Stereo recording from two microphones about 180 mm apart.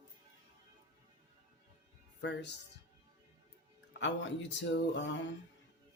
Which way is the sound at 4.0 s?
90° left.